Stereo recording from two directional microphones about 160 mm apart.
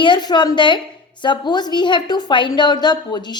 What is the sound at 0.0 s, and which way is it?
A woman's voice, 30° left (ahead or behind).